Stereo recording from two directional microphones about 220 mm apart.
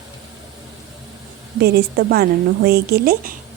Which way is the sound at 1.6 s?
45° right (ahead or behind).